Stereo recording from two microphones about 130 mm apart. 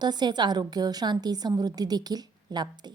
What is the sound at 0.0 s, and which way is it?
A woman's voice, 35° right (ahead or behind).